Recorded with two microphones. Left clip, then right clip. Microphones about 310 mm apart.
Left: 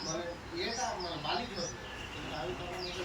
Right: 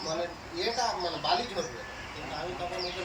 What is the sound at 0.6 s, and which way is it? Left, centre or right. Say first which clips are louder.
Speech: right 7 dB; right.